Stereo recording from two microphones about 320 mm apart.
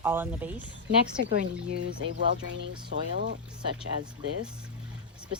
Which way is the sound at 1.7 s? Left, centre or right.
Right.